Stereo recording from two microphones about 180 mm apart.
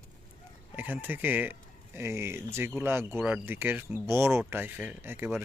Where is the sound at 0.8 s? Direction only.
10° right (ahead or behind).